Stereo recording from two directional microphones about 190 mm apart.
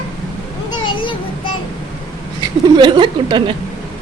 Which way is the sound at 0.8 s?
25° left (ahead or behind).